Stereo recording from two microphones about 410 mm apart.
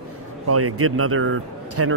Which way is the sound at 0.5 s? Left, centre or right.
Right.